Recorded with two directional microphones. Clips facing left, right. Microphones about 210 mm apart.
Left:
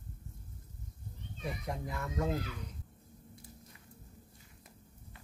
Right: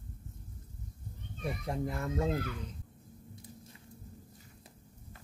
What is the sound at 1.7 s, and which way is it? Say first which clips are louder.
Speech: right 6 dB; 25° right (ahead or behind).